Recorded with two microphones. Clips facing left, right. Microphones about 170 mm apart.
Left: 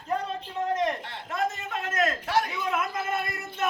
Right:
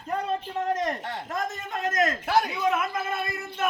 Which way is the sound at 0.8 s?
45° right (ahead or behind).